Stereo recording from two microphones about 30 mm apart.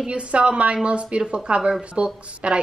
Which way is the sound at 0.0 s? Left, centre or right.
Right.